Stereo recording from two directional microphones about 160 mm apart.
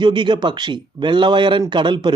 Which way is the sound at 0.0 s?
30° right (ahead or behind).